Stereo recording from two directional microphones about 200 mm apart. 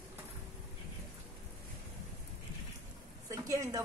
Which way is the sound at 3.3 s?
15° right (ahead or behind).